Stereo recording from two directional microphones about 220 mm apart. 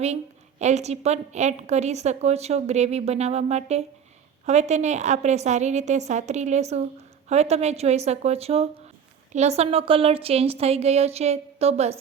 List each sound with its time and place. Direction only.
0.6 s a woman's voice: 30° right (ahead or behind)